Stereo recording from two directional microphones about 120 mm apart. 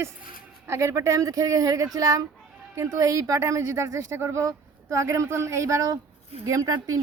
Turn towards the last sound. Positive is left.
turn(degrees=-30)  # may be behind; listen again after turning